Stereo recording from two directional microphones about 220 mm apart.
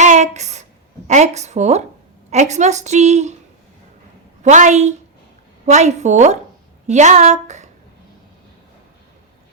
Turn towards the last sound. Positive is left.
turn(degrees=-30)  # may be behind; listen again after turning